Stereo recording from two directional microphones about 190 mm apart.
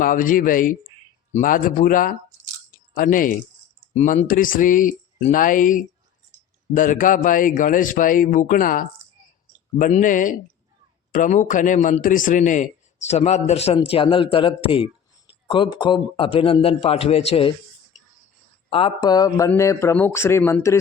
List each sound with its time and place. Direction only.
0.0 s speech: 45° left (ahead or behind)
2.7 s a sound: 45° left (ahead or behind)
3.9 s a man's voice: 40° left (ahead or behind)
18.7 s a man's voice: 30° left (ahead or behind)